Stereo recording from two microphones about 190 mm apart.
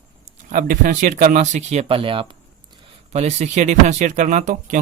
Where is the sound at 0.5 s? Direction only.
45° right (ahead or behind).